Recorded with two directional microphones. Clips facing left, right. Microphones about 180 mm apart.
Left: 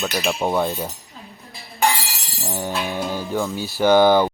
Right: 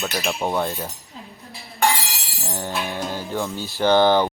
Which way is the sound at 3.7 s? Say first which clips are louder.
Left 2 dB; 10° left (ahead or behind).